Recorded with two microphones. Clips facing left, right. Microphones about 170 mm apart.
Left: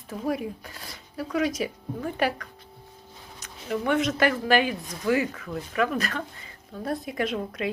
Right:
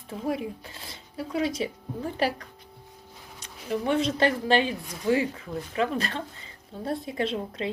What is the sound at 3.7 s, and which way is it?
A woman's voice, 30° right (ahead or behind).